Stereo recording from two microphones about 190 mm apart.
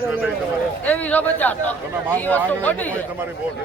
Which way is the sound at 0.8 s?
10° left (ahead or behind).